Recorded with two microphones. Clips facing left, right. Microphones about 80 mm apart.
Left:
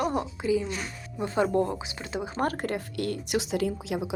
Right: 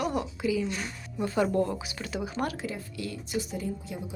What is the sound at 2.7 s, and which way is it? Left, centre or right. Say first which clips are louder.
Speech: left 6 dB; left.